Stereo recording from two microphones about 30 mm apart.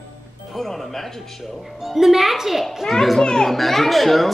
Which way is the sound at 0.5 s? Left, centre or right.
Centre.